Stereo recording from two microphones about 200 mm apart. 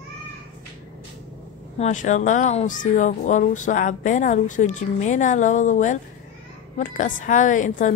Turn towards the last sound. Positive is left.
turn(degrees=40)  # may be behind; listen again after turning